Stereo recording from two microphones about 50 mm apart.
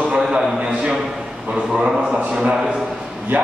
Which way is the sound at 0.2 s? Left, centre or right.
Centre.